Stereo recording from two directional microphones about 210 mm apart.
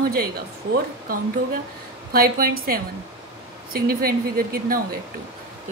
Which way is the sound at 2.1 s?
45° right (ahead or behind).